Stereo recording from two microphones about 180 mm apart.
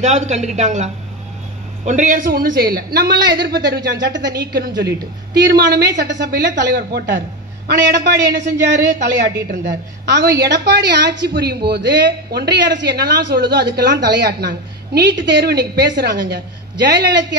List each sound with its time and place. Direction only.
0.0 s a woman's voice: 40° right (ahead or behind); by 17.4 s 65° right (ahead or behind)